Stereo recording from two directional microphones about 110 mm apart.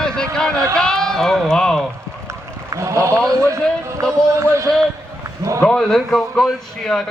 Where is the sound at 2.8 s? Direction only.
25° right (ahead or behind).